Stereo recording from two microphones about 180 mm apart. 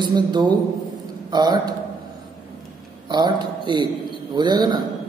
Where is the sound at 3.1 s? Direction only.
25° right (ahead or behind).